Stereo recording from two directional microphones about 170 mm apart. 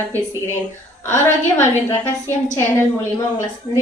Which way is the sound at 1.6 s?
15° left (ahead or behind).